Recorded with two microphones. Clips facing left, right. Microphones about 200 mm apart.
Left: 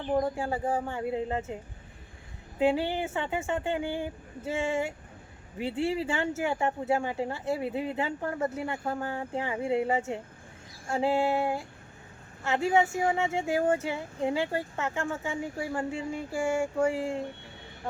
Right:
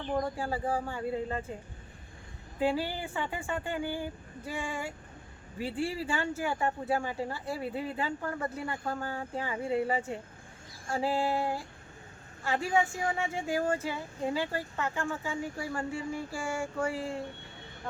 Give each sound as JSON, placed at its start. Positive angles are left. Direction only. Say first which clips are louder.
{"t": 0.2, "sound": "speech", "louder": "left 3 dB", "side_deg": 20}
{"t": 2.6, "sound": "speech", "louder": "left 4 dB", "side_deg": 20}